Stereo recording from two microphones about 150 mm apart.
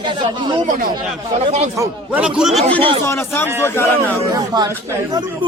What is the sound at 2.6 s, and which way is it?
Speech, 10° left (ahead or behind).